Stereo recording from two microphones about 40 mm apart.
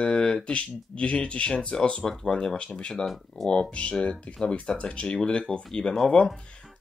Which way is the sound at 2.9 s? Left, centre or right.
Centre.